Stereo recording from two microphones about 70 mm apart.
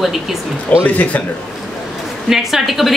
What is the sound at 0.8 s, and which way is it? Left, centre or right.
Speech, centre.